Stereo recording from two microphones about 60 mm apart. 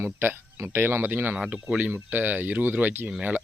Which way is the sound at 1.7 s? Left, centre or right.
Right.